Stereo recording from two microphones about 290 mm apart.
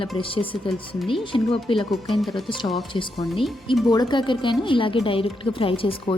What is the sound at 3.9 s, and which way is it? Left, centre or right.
Speech, centre.